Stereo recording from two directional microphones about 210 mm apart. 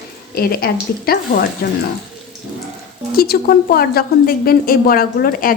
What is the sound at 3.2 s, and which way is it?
A woman's voice, 45° left (ahead or behind).